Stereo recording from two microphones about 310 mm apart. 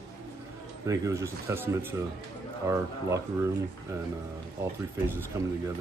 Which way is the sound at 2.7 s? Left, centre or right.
Centre.